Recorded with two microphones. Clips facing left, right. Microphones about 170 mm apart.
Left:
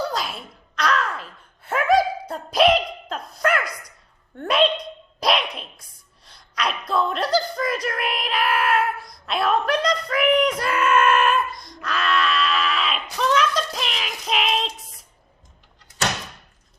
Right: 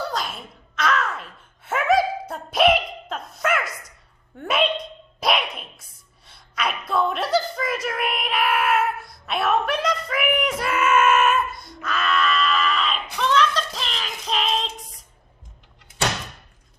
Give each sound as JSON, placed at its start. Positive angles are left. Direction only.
{"t": 0.0, "sound": "a sound", "side_deg": 0}
{"t": 5.2, "sound": "dog", "side_deg": 0}
{"t": 6.2, "sound": "whimper", "side_deg": -5}